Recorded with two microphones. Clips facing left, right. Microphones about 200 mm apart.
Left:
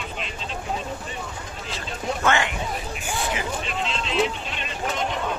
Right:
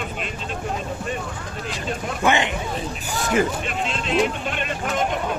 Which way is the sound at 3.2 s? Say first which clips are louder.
Right 11 dB; 50° right (ahead or behind).